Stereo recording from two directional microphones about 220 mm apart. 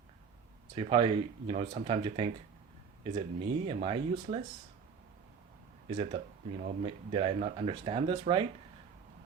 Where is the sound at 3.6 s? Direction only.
25° right (ahead or behind).